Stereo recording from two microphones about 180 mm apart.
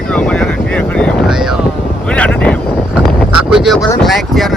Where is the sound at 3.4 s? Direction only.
5° right (ahead or behind).